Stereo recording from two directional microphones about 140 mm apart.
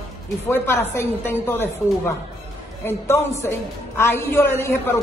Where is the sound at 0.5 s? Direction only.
15° left (ahead or behind).